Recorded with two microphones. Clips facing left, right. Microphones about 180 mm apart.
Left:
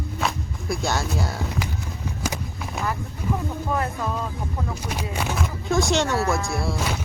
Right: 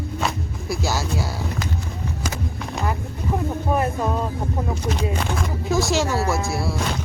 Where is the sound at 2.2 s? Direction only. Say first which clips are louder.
Left 1 dB; 10° left (ahead or behind).